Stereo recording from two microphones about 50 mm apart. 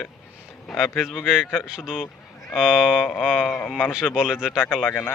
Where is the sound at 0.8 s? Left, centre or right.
Centre.